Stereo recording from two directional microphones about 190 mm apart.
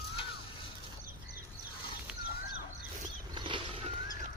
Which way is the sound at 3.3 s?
25° right (ahead or behind).